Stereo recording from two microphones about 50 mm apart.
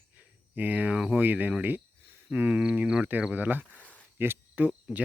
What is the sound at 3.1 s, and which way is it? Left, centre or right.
Speech, right.